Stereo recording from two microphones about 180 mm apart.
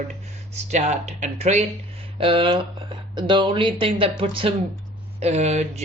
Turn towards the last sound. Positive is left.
turn(degrees=-40)  # may be behind; listen again after turning